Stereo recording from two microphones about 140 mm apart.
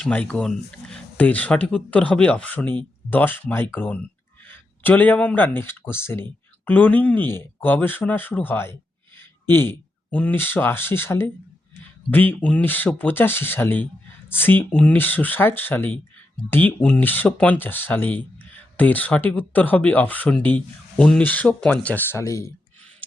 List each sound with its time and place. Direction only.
0.0 s speech: 10° left (ahead or behind)